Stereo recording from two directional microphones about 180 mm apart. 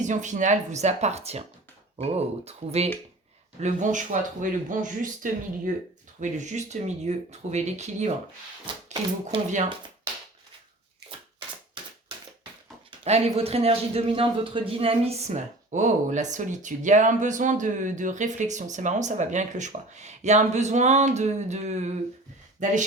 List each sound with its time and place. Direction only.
0.0 s a man's voice: 45° right (ahead or behind)
8.6 s speech: 30° right (ahead or behind)
13.1 s a man's voice: 35° right (ahead or behind)